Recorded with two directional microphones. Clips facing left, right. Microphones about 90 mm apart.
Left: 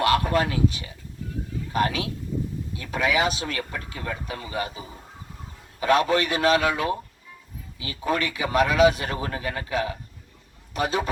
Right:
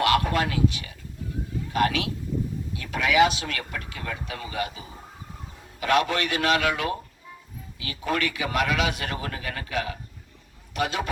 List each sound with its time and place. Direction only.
0.1 s speech: 30° left (ahead or behind)
2.7 s a man's voice: 30° left (ahead or behind)
3.4 s a man's voice: 25° left (ahead or behind)